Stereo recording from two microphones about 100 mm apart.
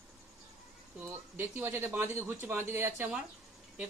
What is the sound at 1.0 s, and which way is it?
Speech, 25° right (ahead or behind).